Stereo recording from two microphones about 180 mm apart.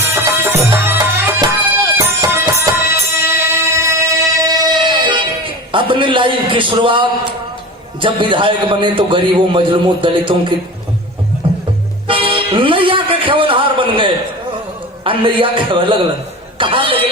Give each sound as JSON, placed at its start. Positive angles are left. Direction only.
{"t": 0.0, "sound": "music", "side_deg": -15}
{"t": 5.7, "sound": "a man's voice", "side_deg": -25}
{"t": 11.4, "sound": "music", "side_deg": -30}
{"t": 15.0, "sound": "a man's voice", "side_deg": -30}